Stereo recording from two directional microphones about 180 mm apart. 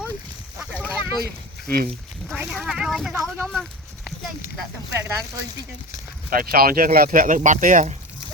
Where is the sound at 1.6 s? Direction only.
60° right (ahead or behind).